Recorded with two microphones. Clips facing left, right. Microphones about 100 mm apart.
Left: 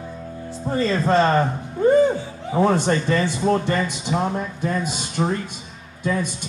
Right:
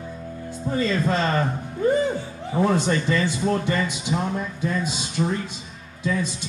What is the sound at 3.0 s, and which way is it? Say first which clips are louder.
Speech: left 3 dB; 50° left (ahead or behind).